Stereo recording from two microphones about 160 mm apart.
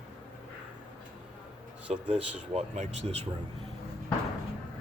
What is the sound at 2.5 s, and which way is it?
Speech, 45° right (ahead or behind).